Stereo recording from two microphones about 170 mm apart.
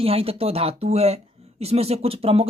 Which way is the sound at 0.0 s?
35° right (ahead or behind).